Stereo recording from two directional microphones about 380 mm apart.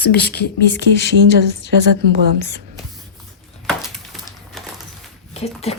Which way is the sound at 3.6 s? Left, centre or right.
Centre.